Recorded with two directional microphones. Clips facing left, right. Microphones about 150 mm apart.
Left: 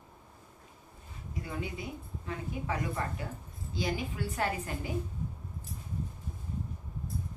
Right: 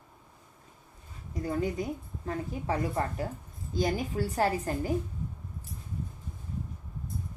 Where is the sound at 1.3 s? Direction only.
40° right (ahead or behind).